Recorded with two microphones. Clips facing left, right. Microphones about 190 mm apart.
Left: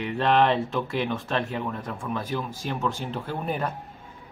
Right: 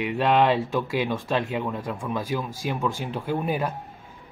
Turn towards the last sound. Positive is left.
turn(degrees=-5)  # may be behind; listen again after turning